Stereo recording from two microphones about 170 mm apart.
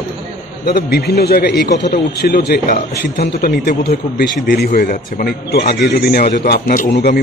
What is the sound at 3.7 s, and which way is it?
A man's voice, 60° left (ahead or behind).